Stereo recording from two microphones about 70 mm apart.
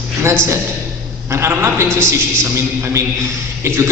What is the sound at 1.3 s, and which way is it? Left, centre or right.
A man's voice, right.